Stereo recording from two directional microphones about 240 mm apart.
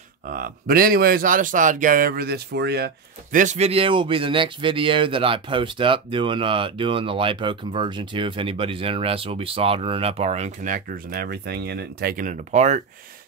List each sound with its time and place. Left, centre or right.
0.3 s speech: right